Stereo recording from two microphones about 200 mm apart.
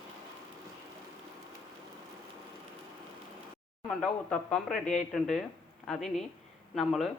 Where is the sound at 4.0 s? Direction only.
5° left (ahead or behind).